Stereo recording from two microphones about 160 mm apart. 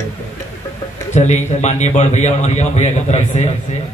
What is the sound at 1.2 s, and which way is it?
A man's voice, 45° left (ahead or behind).